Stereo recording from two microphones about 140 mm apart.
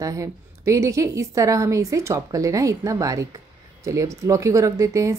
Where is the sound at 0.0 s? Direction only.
25° right (ahead or behind).